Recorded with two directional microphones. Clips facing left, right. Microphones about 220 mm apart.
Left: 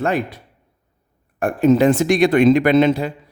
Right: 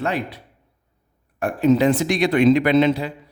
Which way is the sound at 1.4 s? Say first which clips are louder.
Left 3 dB; 50° left (ahead or behind).